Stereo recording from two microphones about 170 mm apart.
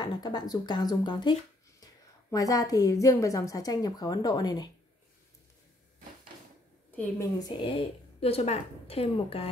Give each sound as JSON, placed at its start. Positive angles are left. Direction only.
{"t": 0.0, "sound": "a woman's voice", "side_deg": 25}
{"t": 2.3, "sound": "a woman's voice", "side_deg": 20}
{"t": 7.0, "sound": "a woman's voice", "side_deg": 20}
{"t": 8.2, "sound": "a woman's voice", "side_deg": 35}